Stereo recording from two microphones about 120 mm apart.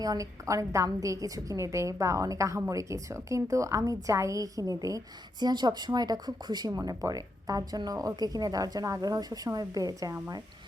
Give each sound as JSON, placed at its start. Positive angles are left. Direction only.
{"t": 0.0, "sound": "a woman's voice", "side_deg": -30}